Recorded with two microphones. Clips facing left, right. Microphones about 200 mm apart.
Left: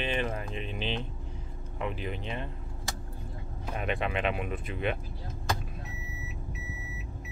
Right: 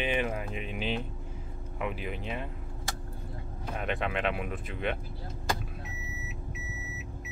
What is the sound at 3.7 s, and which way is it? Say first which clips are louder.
Speech: left 1 dB; centre (ahead or behind).